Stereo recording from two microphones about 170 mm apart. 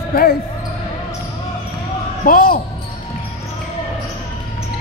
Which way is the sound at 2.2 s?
55° left (ahead or behind).